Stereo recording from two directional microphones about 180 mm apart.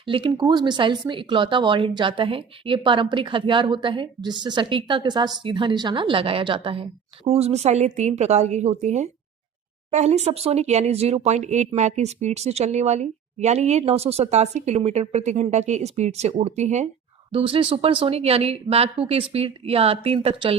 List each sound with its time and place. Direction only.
0.0 s a woman's voice: 30° right (ahead or behind)